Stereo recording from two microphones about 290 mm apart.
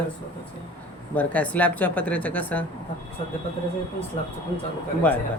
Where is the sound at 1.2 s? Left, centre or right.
Centre.